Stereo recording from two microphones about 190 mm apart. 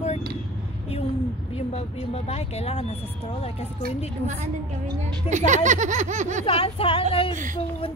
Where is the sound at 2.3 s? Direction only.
35° left (ahead or behind).